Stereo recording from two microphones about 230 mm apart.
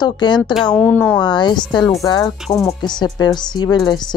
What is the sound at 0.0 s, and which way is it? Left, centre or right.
Speech, centre.